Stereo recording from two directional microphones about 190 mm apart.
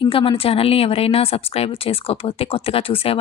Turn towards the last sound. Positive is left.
turn(degrees=30)  # may be behind; listen again after turning